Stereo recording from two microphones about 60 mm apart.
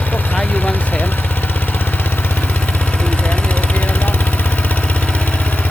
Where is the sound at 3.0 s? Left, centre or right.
Left.